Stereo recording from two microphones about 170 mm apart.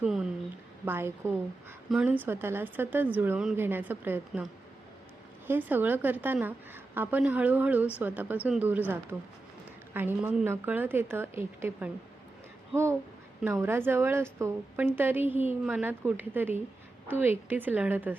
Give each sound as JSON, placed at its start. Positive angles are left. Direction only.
{"t": 0.0, "sound": "a woman's voice", "side_deg": -5}
{"t": 5.5, "sound": "a woman's voice", "side_deg": -10}
{"t": 9.9, "sound": "a woman's voice", "side_deg": -10}